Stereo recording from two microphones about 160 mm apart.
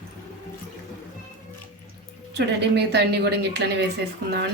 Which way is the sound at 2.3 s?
90° right.